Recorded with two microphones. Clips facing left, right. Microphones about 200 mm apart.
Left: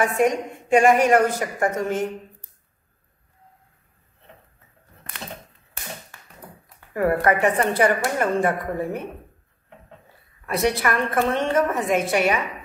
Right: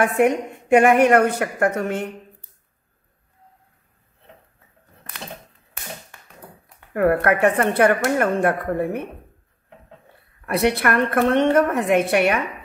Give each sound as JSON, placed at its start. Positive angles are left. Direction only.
{"t": 0.0, "sound": "a woman's voice", "side_deg": -60}
{"t": 6.9, "sound": "a woman's voice", "side_deg": -60}
{"t": 10.4, "sound": "a woman's voice", "side_deg": -65}